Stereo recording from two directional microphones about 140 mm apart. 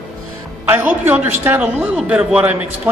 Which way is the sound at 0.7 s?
15° right (ahead or behind).